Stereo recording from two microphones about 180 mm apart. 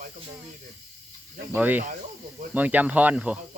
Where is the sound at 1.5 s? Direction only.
10° right (ahead or behind).